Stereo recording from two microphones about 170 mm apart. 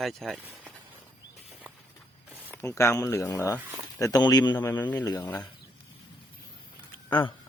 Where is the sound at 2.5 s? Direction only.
15° left (ahead or behind).